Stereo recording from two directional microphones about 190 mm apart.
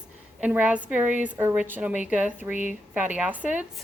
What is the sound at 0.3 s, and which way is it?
A woman's voice, 5° right (ahead or behind).